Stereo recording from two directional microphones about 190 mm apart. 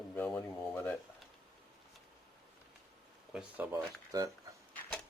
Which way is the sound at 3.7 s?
20° right (ahead or behind).